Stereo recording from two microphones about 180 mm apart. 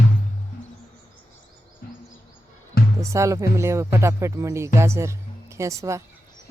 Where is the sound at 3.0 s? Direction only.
15° right (ahead or behind).